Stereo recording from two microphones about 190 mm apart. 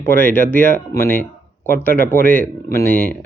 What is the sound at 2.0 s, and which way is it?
Speech, 45° left (ahead or behind).